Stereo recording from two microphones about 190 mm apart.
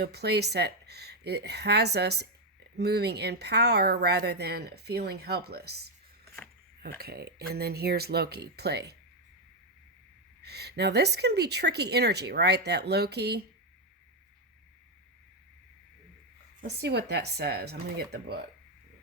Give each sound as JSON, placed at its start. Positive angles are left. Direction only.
{"t": 0.0, "sound": "a woman's voice", "side_deg": -60}
{"t": 7.0, "sound": "a woman's voice", "side_deg": -55}
{"t": 10.4, "sound": "a woman's voice", "side_deg": -60}
{"t": 16.6, "sound": "a woman's voice", "side_deg": -60}